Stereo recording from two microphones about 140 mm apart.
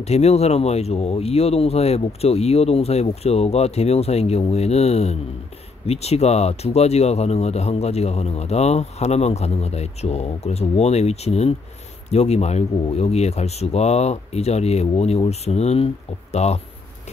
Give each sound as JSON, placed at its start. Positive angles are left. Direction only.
{"t": 0.0, "sound": "speech", "side_deg": 50}